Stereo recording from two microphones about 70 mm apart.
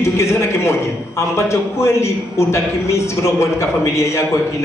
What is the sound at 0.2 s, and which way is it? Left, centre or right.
A man's voice, left.